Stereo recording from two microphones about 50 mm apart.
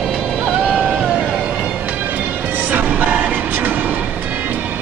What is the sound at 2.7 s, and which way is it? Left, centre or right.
Music, right.